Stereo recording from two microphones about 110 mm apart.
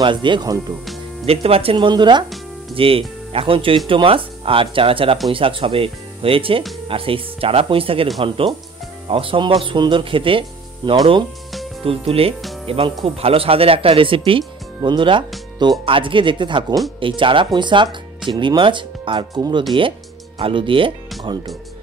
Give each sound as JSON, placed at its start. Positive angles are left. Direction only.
{"t": 0.0, "sound": "speech", "side_deg": -45}
{"t": 1.2, "sound": "speech", "side_deg": -65}
{"t": 1.9, "sound": "speech", "side_deg": -45}
{"t": 2.7, "sound": "speech", "side_deg": -55}
{"t": 9.1, "sound": "speech", "side_deg": -50}
{"t": 11.8, "sound": "speech", "side_deg": -60}